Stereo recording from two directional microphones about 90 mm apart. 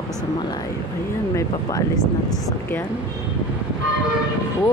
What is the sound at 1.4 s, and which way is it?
Speech, 40° left (ahead or behind).